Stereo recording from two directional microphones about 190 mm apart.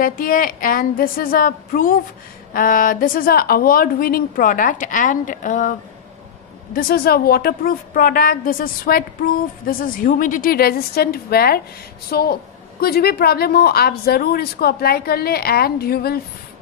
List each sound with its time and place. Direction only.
0.0 s a woman's voice: 50° left (ahead or behind)